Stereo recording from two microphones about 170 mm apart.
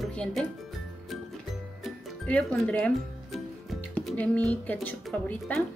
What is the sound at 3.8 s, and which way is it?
Speech, 10° left (ahead or behind).